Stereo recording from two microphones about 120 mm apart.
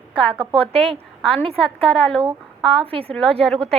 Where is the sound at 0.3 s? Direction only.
50° right (ahead or behind).